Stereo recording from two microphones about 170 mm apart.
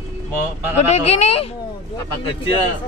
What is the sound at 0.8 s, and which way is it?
Speech, 40° left (ahead or behind).